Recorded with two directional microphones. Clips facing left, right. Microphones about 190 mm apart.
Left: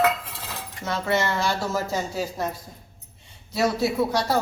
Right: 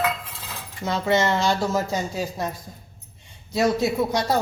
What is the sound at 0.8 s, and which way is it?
Speech, 15° right (ahead or behind).